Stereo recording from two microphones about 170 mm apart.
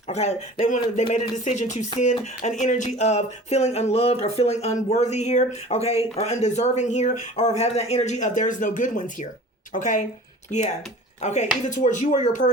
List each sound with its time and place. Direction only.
0.1 s speech: 40° left (ahead or behind)
2.4 s a sound: 45° left (ahead or behind)
6.1 s speech: 40° left (ahead or behind)
11.2 s speech: 45° left (ahead or behind)